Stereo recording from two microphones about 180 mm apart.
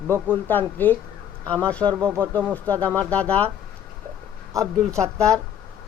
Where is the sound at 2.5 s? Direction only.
10° left (ahead or behind).